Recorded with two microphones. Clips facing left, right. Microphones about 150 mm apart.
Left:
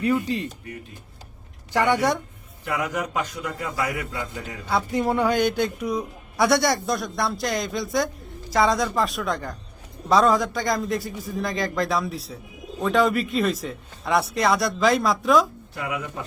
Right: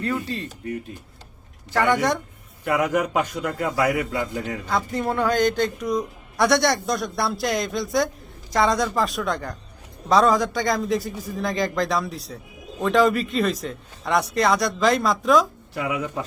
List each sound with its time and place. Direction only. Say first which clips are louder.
0.0 s speech: left 4 dB; 15° left (ahead or behind)
1.7 s speech: even; 15° left (ahead or behind)
2.6 s a man's voice: right 5 dB; 60° right (ahead or behind)
4.7 s speech: left 2 dB; 10° left (ahead or behind)